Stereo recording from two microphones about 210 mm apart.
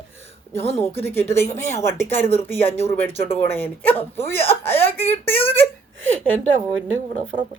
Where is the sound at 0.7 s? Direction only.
10° left (ahead or behind).